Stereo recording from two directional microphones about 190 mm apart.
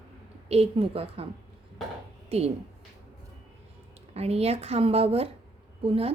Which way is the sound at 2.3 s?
30° right (ahead or behind).